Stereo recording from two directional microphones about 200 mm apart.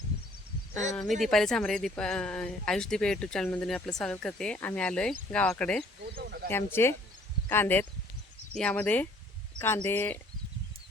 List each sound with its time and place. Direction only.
1.2 s speech: centre (ahead or behind)
6.1 s a sound: 50° right (ahead or behind)
6.5 s speech: 10° left (ahead or behind)